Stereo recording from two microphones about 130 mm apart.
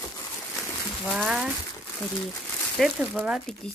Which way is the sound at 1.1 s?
Centre (ahead or behind).